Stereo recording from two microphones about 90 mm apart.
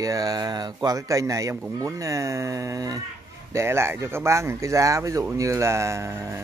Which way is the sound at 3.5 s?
30° right (ahead or behind).